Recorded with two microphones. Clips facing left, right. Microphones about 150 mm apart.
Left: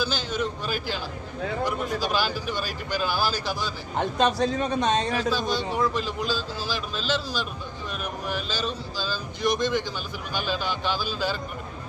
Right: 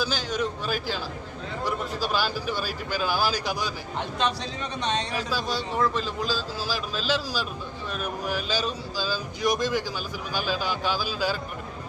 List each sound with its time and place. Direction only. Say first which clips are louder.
0.0 s a man's voice: even; 5° right (ahead or behind)
1.6 s speech: even; 10° right (ahead or behind)
3.9 s a man's voice: left 6 dB; 45° left (ahead or behind)
5.1 s a man's voice: left 3 dB; 5° right (ahead or behind)